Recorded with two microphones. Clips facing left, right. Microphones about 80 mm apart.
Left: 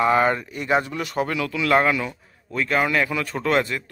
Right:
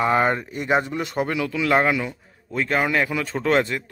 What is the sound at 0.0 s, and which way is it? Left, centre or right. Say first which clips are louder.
Speech: left 1 dB; right.